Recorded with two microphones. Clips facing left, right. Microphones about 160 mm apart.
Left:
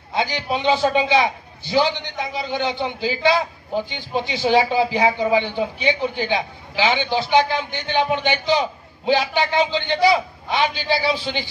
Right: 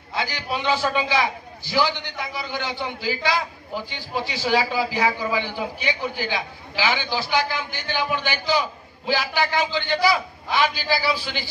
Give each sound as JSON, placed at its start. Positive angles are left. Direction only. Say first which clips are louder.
{"t": 0.1, "sound": "a man's voice", "louder": "left 5 dB", "side_deg": 20}